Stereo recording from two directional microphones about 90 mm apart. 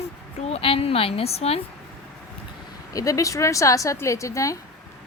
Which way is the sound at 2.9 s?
40° left (ahead or behind).